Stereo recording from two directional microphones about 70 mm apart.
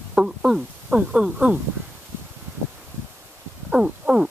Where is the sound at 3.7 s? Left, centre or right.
Centre.